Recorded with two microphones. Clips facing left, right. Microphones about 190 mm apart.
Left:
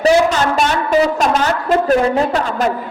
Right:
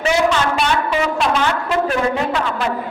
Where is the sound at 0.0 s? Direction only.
40° left (ahead or behind).